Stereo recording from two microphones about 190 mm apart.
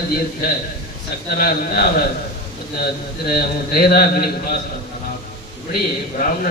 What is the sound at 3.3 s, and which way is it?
A man's voice, 55° left (ahead or behind).